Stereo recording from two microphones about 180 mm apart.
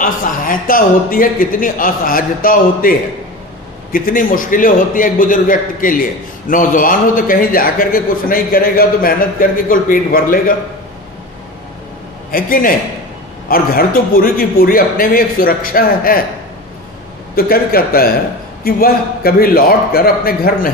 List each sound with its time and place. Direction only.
0.0 s a man's voice: 50° left (ahead or behind)
12.3 s a man's voice: 50° left (ahead or behind)
17.4 s a man's voice: 55° left (ahead or behind)